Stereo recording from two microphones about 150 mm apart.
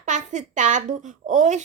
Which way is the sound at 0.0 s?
55° right (ahead or behind).